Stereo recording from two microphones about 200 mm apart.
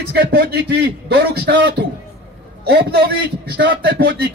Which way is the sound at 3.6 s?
60° right (ahead or behind).